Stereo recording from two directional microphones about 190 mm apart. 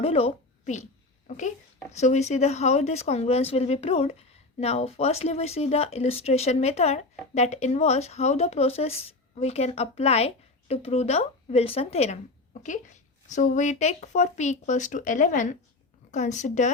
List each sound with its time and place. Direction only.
0.0 s a woman's voice: 30° left (ahead or behind)